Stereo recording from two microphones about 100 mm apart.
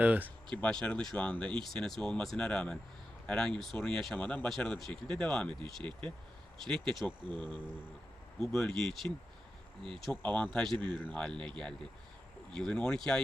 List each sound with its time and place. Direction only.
0.0 s speech: 15° right (ahead or behind)
0.5 s speech: 10° left (ahead or behind)
6.7 s speech: 5° left (ahead or behind)
8.4 s speech: 5° left (ahead or behind)
10.1 s speech: 15° left (ahead or behind)